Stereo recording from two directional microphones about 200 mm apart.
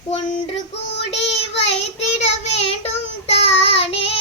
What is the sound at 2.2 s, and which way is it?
Child singing, 35° left (ahead or behind).